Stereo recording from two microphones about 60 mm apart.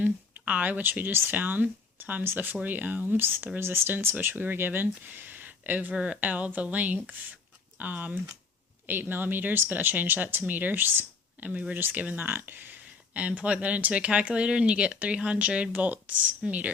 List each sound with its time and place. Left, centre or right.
0.0 s speech: right